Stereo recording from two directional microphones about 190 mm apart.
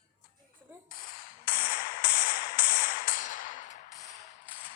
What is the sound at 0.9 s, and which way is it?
Music, 50° left (ahead or behind).